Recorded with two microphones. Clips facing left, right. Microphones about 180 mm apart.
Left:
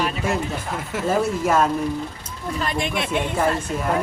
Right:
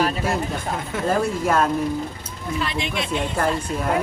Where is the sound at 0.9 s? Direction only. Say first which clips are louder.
Left 1 dB; centre (ahead or behind).